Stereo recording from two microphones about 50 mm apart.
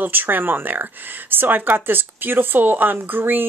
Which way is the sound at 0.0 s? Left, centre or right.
Right.